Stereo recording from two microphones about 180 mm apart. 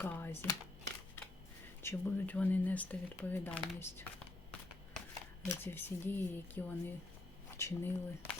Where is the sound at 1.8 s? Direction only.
10° left (ahead or behind).